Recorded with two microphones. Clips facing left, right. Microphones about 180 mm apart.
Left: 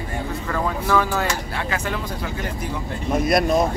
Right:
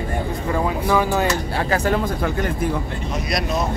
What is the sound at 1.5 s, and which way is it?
Speech, 35° right (ahead or behind).